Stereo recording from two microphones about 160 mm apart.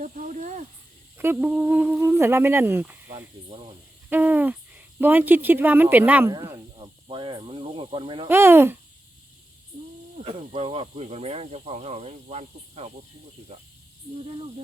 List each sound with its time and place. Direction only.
0.0 s snake: 50° right (ahead or behind)
1.2 s speech: 10° right (ahead or behind)
6.3 s speech: 25° right (ahead or behind)
6.7 s speech: 35° right (ahead or behind)
8.3 s speech: 15° right (ahead or behind)
10.2 s speech: 35° right (ahead or behind)